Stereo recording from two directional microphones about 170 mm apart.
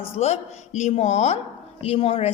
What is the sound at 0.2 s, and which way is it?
A woman's voice, 40° left (ahead or behind).